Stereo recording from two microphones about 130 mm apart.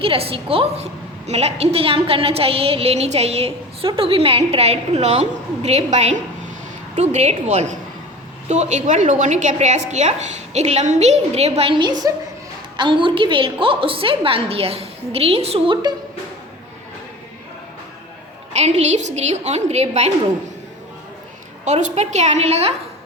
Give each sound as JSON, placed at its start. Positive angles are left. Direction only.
{"t": 0.0, "sound": "a woman's voice", "side_deg": -45}
{"t": 11.7, "sound": "a woman's voice", "side_deg": -35}
{"t": 18.5, "sound": "a woman's voice", "side_deg": -60}
{"t": 21.6, "sound": "a woman's voice", "side_deg": -65}